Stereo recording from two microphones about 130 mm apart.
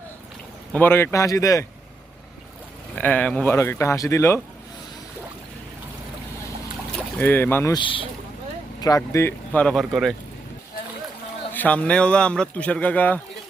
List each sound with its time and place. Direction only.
0.7 s speech: 15° left (ahead or behind)
3.0 s speech: 10° left (ahead or behind)
3.5 s speech: 20° left (ahead or behind)
7.2 s speech: 15° left (ahead or behind)
7.7 s speech: 40° left (ahead or behind)
8.8 s speech: 25° left (ahead or behind); by 10.2 s centre (ahead or behind)
11.5 s speech: 10° left (ahead or behind)